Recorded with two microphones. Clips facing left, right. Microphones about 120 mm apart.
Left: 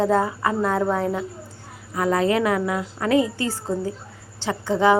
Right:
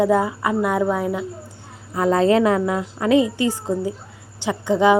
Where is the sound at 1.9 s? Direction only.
25° right (ahead or behind).